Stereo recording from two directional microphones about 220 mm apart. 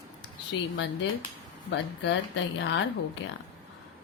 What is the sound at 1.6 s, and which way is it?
Speech, 55° left (ahead or behind).